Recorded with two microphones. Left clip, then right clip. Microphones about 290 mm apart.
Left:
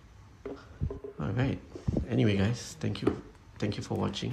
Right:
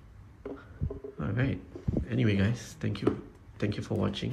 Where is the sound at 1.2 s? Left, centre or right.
Centre.